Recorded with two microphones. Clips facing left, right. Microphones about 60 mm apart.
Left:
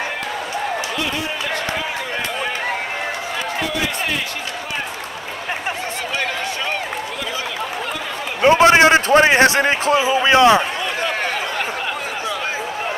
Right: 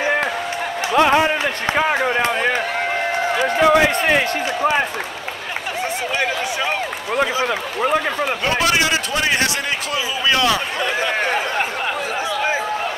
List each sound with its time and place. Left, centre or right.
0.9 s a man's voice: right
1.8 s a sound: right
3.6 s run: right
8.4 s a man's voice: left